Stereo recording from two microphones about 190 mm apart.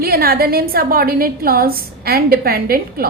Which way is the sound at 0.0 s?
50° right (ahead or behind).